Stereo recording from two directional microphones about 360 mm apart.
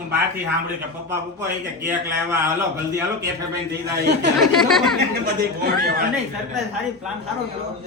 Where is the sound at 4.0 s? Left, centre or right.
Right.